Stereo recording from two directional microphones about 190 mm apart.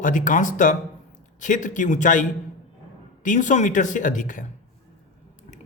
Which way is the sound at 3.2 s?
40° left (ahead or behind).